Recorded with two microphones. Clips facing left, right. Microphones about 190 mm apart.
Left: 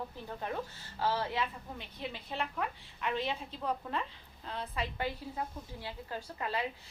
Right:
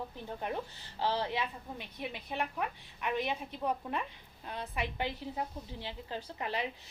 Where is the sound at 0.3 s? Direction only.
20° right (ahead or behind).